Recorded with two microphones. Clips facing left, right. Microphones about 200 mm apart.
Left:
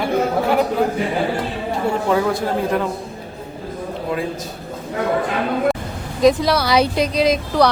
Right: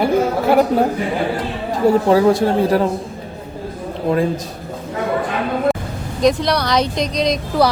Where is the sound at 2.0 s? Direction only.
35° right (ahead or behind).